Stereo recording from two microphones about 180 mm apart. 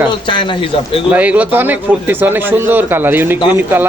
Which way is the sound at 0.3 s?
25° left (ahead or behind).